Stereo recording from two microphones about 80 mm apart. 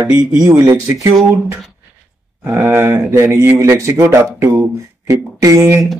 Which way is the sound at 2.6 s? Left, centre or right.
Right.